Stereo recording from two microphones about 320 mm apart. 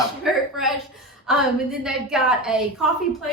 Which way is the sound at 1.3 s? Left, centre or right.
Centre.